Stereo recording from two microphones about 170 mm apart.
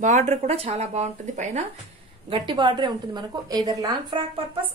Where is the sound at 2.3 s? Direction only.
30° right (ahead or behind).